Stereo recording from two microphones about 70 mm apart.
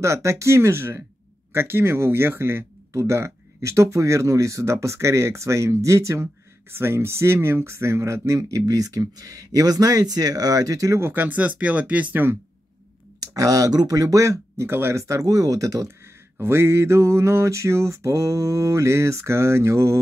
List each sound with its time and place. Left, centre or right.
0.0 s mantra: right
2.9 s speech: right
11.0 s mantra: right
11.2 s speech: right
13.4 s speech: right
16.3 s mantra: right